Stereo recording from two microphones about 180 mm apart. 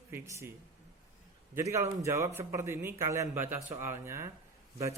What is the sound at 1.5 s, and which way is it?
Speech, 15° right (ahead or behind).